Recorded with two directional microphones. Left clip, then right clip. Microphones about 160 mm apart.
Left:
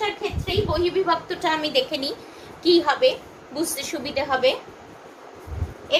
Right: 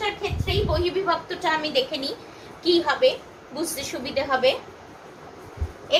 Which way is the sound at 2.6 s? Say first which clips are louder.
Left 2 dB; 65° left (ahead or behind).